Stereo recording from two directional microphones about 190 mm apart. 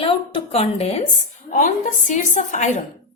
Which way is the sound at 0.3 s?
30° left (ahead or behind).